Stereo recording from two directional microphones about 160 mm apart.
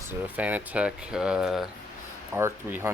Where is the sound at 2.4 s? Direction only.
15° right (ahead or behind).